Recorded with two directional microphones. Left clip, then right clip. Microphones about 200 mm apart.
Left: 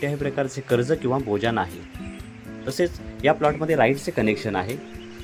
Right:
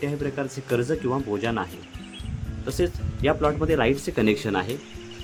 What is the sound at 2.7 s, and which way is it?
A man's voice, 15° left (ahead or behind).